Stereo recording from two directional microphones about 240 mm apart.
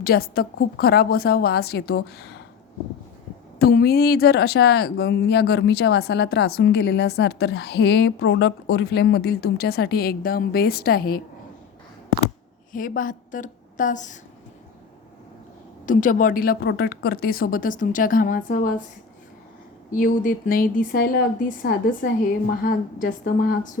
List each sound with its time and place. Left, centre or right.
0.0 s a woman's voice: left
3.6 s a woman's voice: left
12.7 s a woman's voice: left
15.9 s a woman's voice: left
19.9 s a woman's voice: left